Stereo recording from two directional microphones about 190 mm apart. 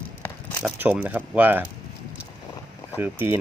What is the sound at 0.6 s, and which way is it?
Speech, 10° right (ahead or behind).